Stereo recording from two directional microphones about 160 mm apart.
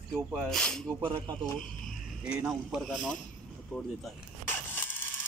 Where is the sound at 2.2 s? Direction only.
5° right (ahead or behind).